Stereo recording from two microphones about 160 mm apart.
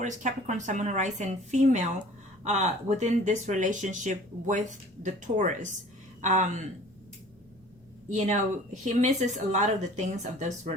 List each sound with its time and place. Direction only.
0.0 s speech: 50° right (ahead or behind)
8.1 s speech: 45° right (ahead or behind)